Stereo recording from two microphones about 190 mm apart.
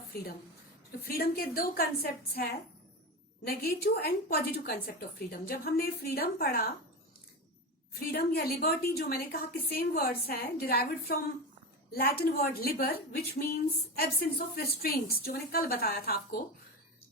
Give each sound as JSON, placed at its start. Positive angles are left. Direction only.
{"t": 1.0, "sound": "a woman's voice", "side_deg": 50}
{"t": 7.9, "sound": "a woman's voice", "side_deg": 55}